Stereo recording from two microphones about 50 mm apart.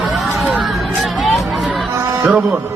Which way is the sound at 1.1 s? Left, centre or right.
Centre.